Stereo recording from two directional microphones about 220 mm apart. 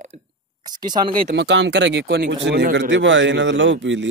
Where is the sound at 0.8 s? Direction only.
20° right (ahead or behind).